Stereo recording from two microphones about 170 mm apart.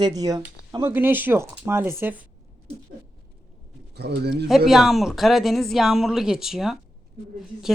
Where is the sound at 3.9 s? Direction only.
70° right (ahead or behind).